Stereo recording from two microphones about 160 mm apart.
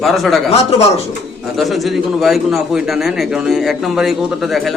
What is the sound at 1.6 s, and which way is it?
A man's voice, centre (ahead or behind).